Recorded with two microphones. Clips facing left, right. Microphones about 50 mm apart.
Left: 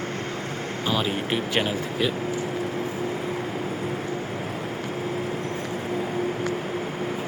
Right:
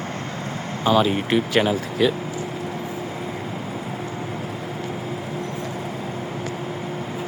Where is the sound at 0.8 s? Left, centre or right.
Right.